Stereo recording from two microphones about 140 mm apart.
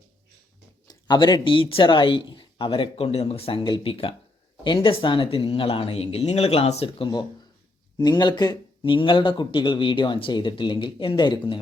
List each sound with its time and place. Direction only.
0.9 s speech: 30° left (ahead or behind)